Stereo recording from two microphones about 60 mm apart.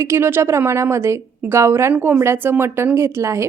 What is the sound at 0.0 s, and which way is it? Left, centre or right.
A woman's voice, right.